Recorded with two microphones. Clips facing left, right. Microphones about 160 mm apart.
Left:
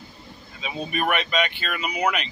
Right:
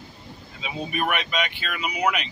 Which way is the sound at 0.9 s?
5° right (ahead or behind).